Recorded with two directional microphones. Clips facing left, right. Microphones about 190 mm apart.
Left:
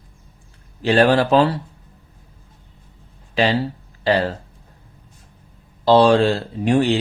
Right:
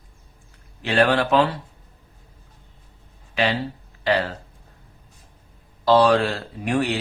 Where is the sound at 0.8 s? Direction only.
35° left (ahead or behind).